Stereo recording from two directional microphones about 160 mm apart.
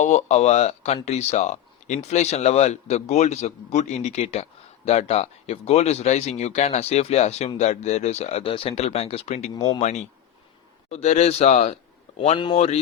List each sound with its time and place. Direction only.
0.0 s speech: 45° left (ahead or behind)
9.6 s speech: 25° left (ahead or behind)
9.8 s a man's voice: 45° left (ahead or behind)